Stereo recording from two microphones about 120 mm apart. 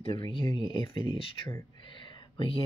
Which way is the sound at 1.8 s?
45° left (ahead or behind).